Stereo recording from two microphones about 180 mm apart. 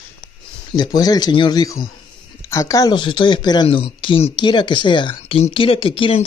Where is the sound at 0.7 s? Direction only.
20° left (ahead or behind).